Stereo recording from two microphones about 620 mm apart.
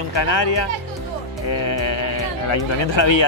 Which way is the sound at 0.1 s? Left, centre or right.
Left.